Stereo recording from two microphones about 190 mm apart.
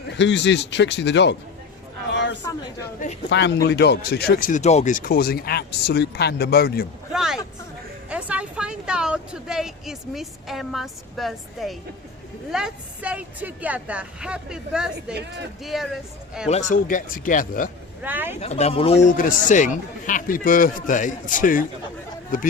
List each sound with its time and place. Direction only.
0.2 s speech: 70° left (ahead or behind)
2.1 s chatter: 70° left (ahead or behind)
3.2 s speech: 65° left (ahead or behind)
7.1 s vehicle: centre (ahead or behind)
8.1 s speech: 5° right (ahead or behind)
16.5 s speech: 40° left (ahead or behind)
18.0 s speech: 10° right (ahead or behind)
18.3 s speech: 35° left (ahead or behind)
19.0 s speech: 45° left (ahead or behind)